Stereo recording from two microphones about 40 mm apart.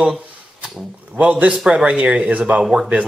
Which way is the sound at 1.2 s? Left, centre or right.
Right.